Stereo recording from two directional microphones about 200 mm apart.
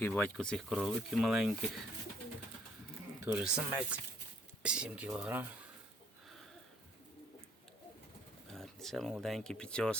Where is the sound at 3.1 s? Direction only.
10° right (ahead or behind).